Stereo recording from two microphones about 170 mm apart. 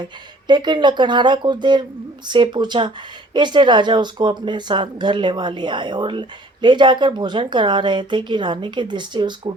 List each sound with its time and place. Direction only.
0.0 s speech: 25° right (ahead or behind)